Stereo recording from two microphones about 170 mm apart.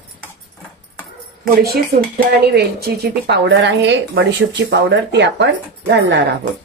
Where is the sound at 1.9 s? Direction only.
70° right (ahead or behind).